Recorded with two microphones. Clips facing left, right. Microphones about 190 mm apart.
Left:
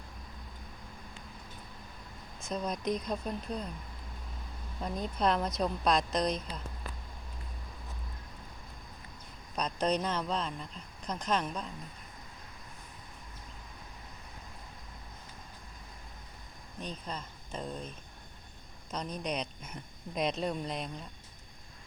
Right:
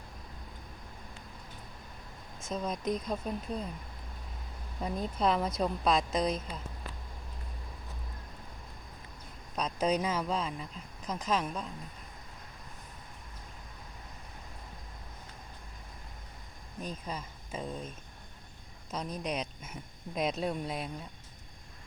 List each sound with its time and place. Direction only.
2.5 s speech: centre (ahead or behind)
4.8 s speech: 5° right (ahead or behind)
9.6 s speech: 5° right (ahead or behind)
16.8 s speech: 5° right (ahead or behind)